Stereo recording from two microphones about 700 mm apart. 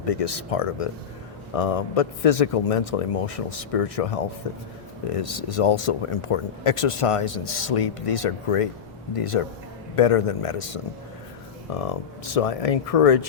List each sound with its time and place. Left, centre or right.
0.1 s speech: left
11.7 s speech: left